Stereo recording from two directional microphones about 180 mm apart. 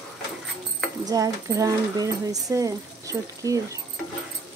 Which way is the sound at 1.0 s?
20° right (ahead or behind).